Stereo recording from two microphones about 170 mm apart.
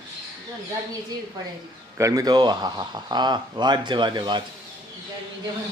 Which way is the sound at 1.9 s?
20° right (ahead or behind).